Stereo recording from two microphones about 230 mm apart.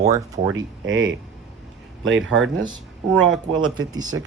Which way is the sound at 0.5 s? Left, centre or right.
Right.